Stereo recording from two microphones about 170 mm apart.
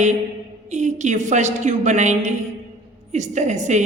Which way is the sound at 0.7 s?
45° right (ahead or behind).